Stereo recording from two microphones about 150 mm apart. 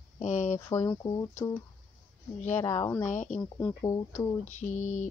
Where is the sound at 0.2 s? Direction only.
55° left (ahead or behind).